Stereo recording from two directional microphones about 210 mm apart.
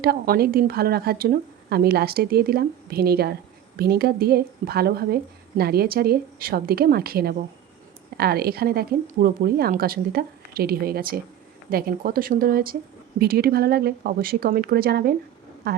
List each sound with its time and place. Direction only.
0.0 s a woman's voice: 45° right (ahead or behind)